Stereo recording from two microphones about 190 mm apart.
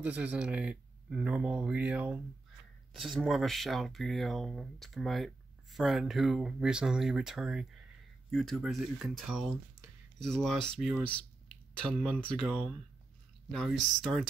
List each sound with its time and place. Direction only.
0.0 s speech: 10° right (ahead or behind)